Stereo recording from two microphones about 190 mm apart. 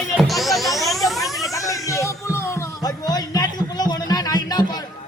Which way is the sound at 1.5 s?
15° left (ahead or behind).